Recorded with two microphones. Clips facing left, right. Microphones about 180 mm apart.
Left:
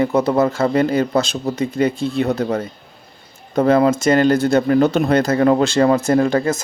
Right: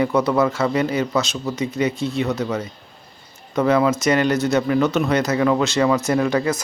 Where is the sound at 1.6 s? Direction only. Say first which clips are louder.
Left 3 dB; 55° left (ahead or behind).